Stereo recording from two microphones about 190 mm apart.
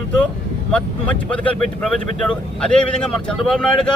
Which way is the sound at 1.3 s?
5° left (ahead or behind).